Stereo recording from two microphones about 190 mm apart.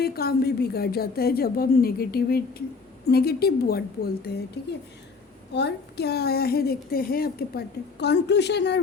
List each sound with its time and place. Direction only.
0.0 s a woman's voice: 55° left (ahead or behind)
5.5 s a woman's voice: 60° left (ahead or behind)